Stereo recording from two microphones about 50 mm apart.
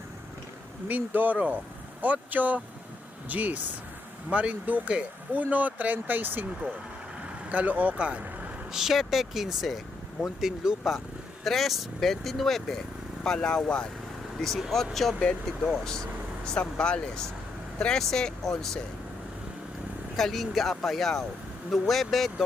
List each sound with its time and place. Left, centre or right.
0.9 s speech: right
8.7 s speech: centre
11.4 s speech: centre
15.2 s speech: centre
20.1 s speech: centre